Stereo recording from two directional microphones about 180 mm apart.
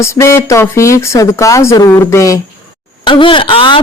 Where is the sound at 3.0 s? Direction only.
30° left (ahead or behind).